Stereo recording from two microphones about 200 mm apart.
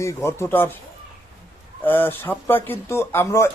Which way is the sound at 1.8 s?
10° left (ahead or behind).